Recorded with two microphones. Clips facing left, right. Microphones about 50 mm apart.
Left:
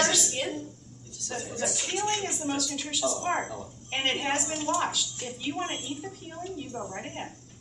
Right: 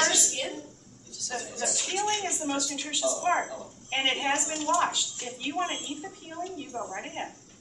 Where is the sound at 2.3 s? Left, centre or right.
Centre.